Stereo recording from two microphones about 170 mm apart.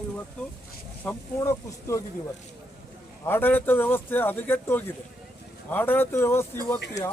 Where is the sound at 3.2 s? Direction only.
10° left (ahead or behind).